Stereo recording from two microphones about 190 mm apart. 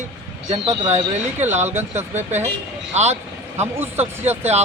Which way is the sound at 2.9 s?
35° right (ahead or behind).